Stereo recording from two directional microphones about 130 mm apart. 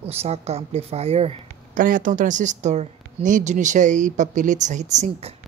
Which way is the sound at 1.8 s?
90° right.